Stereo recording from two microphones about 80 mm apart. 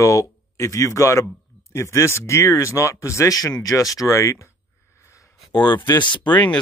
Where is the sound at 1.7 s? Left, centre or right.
Left.